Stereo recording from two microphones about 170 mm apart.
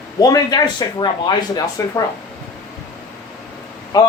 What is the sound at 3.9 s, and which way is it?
Speech, 20° left (ahead or behind).